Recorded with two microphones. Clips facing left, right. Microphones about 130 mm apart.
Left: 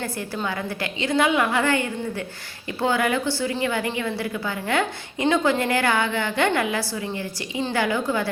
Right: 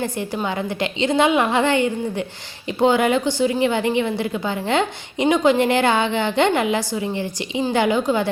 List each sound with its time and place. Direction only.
0.0 s a woman's voice: 20° right (ahead or behind)